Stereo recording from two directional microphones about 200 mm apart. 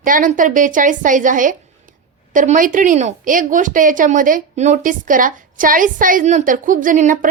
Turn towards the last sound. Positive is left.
turn(degrees=-40)  # may be behind; listen again after turning